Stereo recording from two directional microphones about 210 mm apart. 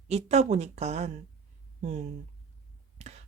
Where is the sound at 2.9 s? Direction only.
30° right (ahead or behind).